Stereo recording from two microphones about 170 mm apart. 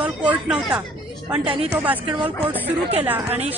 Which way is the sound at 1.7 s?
10° right (ahead or behind).